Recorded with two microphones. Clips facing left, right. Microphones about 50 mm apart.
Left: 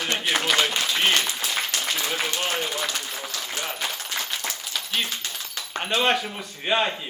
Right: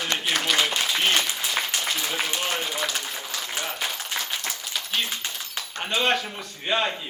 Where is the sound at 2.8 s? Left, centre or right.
Centre.